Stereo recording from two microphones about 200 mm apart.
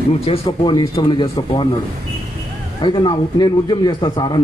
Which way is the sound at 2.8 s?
25° left (ahead or behind).